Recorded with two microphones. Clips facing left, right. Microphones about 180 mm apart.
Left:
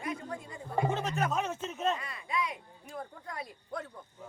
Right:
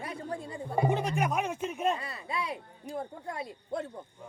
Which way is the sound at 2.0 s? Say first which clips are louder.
Left 1 dB; 30° right (ahead or behind).